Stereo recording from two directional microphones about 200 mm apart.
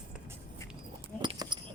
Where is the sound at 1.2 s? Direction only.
20° right (ahead or behind).